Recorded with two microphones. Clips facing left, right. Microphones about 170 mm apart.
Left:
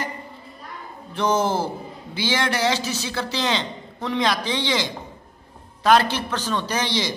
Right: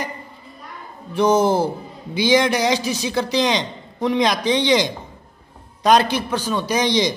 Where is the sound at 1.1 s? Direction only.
10° right (ahead or behind).